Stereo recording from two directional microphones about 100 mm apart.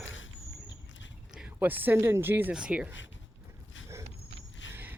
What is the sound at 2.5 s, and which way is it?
Speech, 10° right (ahead or behind).